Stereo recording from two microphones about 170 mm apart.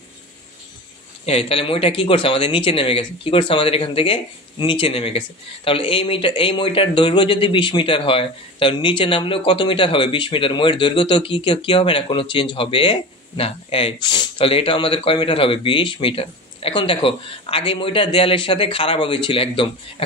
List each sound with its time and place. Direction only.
1.2 s a man's voice: 35° left (ahead or behind)